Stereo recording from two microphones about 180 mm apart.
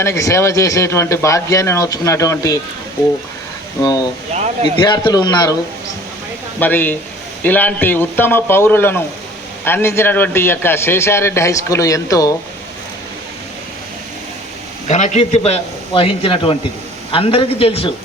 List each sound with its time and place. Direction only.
0.0 s a man's voice: 15° left (ahead or behind)
4.4 s speech: 35° right (ahead or behind)
4.8 s a man's voice: 25° left (ahead or behind)
6.6 s a man's voice: 10° left (ahead or behind)
14.8 s a man's voice: 40° left (ahead or behind)